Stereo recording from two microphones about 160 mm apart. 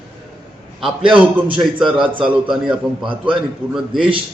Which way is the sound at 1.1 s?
10° right (ahead or behind).